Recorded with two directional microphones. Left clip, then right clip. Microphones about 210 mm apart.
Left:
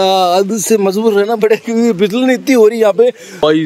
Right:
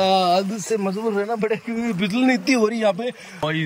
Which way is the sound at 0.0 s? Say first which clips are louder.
Left 7 dB; 15° left (ahead or behind).